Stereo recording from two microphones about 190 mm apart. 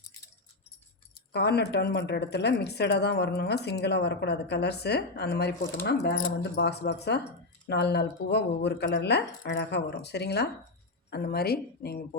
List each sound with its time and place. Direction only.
1.3 s a woman's voice: 60° left (ahead or behind)